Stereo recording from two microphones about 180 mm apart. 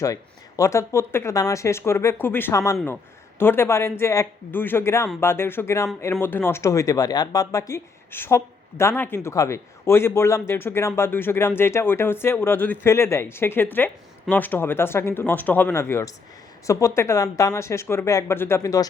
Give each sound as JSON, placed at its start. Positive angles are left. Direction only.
{"t": 0.0, "sound": "a man's voice", "side_deg": 20}